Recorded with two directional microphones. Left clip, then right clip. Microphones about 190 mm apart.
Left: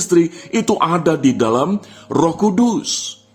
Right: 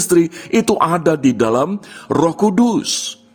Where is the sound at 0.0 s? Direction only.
35° right (ahead or behind).